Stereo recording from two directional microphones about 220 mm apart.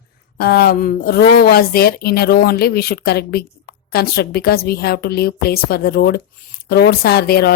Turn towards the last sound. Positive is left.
turn(degrees=45)  # may be behind; listen again after turning